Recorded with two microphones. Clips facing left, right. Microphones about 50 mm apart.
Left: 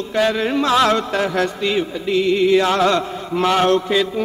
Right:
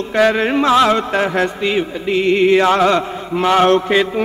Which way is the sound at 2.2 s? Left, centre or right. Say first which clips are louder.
Right 3 dB; right.